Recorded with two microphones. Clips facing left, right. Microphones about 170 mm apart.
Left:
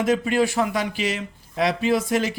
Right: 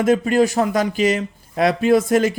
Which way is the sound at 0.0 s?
45° right (ahead or behind).